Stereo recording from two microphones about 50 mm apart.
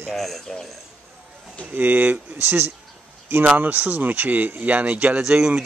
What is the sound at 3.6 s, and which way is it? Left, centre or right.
Speech, right.